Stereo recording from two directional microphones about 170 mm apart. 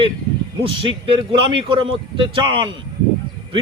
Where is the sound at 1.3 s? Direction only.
30° right (ahead or behind).